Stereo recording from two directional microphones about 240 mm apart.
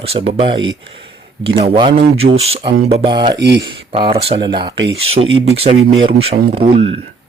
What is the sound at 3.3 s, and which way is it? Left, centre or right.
Speech, right.